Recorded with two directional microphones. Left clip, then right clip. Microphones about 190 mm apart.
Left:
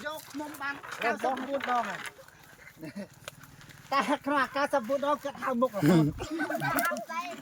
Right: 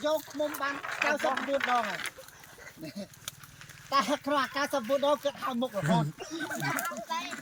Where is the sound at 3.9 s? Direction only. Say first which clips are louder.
Even; 5° left (ahead or behind).